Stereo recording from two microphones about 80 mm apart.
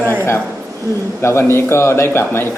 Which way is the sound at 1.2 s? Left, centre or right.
Left.